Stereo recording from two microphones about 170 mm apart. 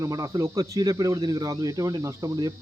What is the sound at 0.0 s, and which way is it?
Speech, 20° right (ahead or behind).